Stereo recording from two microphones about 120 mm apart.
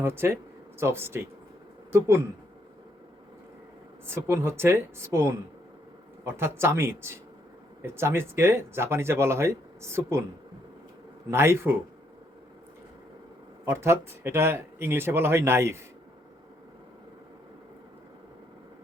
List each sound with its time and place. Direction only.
0.0 s speech: 20° right (ahead or behind)
4.0 s speech: 20° right (ahead or behind)
11.3 s speech: 20° right (ahead or behind)
13.7 s speech: 20° right (ahead or behind)